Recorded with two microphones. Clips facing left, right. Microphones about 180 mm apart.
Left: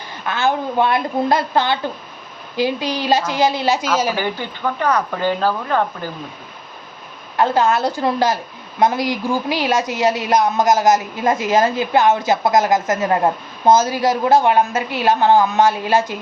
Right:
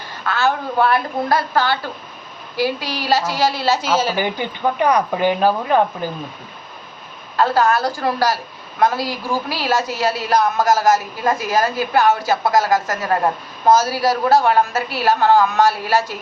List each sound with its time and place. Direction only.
0.3 s a woman's voice: 15° left (ahead or behind)
4.2 s speech: 15° right (ahead or behind)
7.3 s a woman's voice: 20° left (ahead or behind)